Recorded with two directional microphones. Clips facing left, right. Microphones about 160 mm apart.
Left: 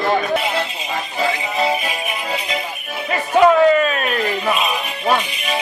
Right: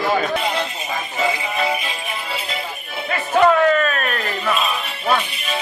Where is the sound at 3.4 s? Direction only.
10° left (ahead or behind).